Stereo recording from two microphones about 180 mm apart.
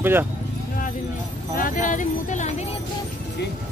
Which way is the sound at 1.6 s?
50° left (ahead or behind).